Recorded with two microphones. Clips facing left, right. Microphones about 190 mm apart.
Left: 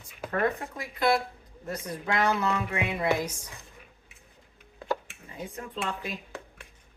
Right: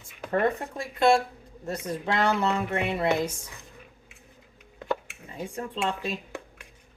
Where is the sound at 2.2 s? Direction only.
25° right (ahead or behind).